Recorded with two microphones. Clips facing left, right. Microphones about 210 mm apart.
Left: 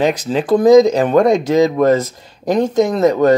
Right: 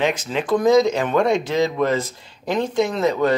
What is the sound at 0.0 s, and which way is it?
Speech, 35° left (ahead or behind).